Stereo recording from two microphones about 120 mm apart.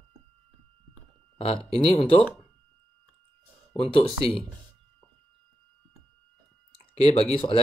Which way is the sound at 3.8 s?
50° left (ahead or behind).